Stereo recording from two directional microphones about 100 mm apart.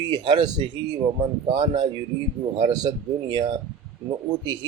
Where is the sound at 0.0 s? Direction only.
50° right (ahead or behind).